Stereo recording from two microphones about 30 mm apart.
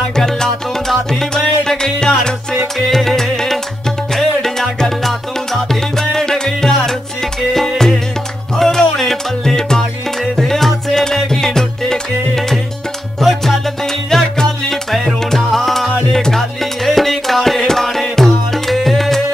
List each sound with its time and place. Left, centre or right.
0.1 s music: centre
2.0 s music: left
2.9 s music: centre
9.4 s music: centre
13.2 s music: centre
14.1 s music: centre
14.7 s music: centre